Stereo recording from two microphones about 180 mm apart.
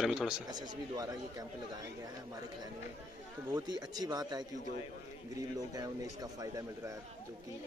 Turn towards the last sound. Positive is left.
turn(degrees=-20)  # may be behind; listen again after turning